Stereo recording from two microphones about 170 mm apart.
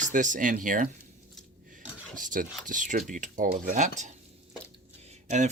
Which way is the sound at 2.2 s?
50° right (ahead or behind).